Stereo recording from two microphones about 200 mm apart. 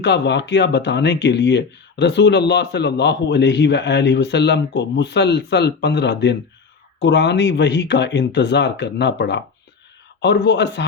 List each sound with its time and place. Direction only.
0.0 s speech: 60° left (ahead or behind)